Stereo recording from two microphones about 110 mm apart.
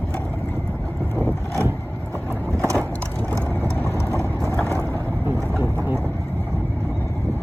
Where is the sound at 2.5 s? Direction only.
25° right (ahead or behind).